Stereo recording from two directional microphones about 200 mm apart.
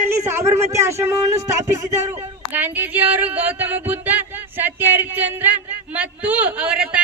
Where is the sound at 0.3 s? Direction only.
15° right (ahead or behind).